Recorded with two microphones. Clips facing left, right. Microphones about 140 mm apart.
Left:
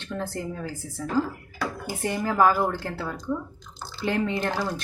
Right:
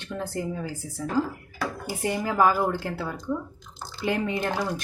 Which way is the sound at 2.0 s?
15° right (ahead or behind).